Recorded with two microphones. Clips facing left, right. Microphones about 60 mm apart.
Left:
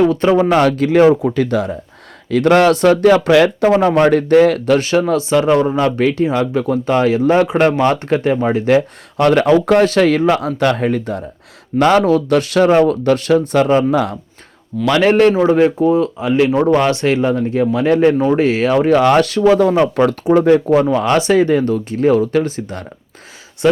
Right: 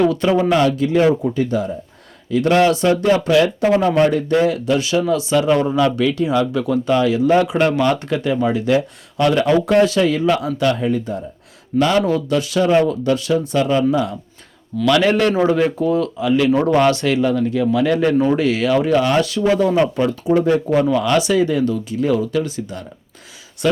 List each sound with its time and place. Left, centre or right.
0.0 s speech: left
0.9 s speech: left
13.9 s speech: left
14.8 s speech: left
20.1 s speech: left
20.7 s speech: left